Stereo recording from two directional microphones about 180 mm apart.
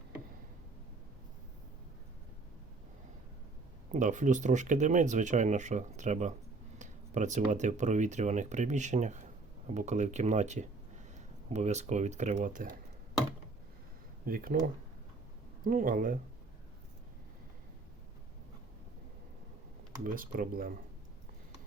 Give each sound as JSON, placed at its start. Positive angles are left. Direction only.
{"t": 3.9, "sound": "speech", "side_deg": -45}
{"t": 14.3, "sound": "speech", "side_deg": -55}
{"t": 15.6, "sound": "speech", "side_deg": -50}
{"t": 20.1, "sound": "speech", "side_deg": -50}